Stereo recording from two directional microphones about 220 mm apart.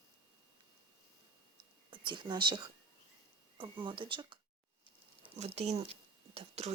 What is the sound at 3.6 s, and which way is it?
Speech, 20° right (ahead or behind).